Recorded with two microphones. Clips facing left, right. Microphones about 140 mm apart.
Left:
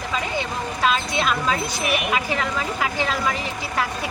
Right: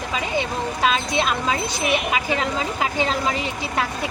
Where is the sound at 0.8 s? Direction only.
25° right (ahead or behind).